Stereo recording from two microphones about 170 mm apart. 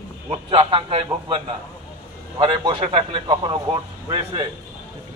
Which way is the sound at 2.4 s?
30° right (ahead or behind).